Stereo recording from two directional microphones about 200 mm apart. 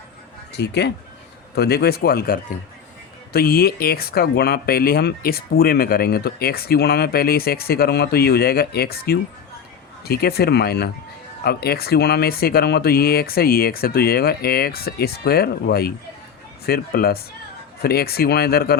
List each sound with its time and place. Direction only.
0.5 s speech: 55° left (ahead or behind)